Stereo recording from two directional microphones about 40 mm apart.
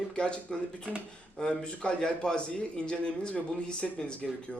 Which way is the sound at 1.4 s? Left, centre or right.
Left.